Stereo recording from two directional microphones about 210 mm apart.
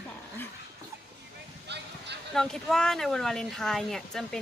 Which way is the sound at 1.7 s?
55° right (ahead or behind).